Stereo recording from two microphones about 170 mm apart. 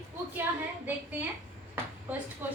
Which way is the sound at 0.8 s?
10° right (ahead or behind).